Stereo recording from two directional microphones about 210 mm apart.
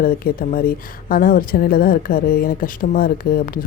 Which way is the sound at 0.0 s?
40° left (ahead or behind).